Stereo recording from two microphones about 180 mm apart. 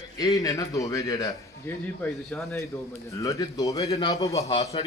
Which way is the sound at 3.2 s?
20° left (ahead or behind).